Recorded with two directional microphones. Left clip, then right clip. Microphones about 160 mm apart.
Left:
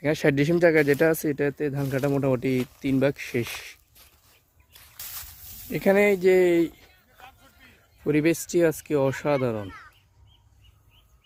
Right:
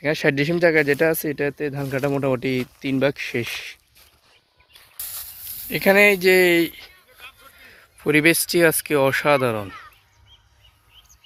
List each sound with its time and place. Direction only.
0.0 s speech: 20° left (ahead or behind)
1.5 s speech: 5° left (ahead or behind)
5.7 s speech: 10° left (ahead or behind)
8.0 s speech: centre (ahead or behind)